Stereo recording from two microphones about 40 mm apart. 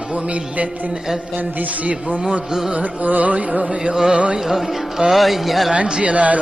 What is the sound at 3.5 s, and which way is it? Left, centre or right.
Music, right.